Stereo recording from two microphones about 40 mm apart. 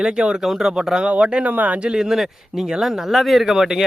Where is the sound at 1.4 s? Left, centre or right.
Right.